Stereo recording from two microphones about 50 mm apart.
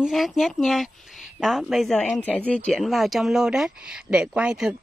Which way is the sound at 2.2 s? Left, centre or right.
Left.